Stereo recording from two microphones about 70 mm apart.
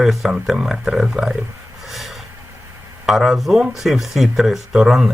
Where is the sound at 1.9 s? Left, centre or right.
Centre.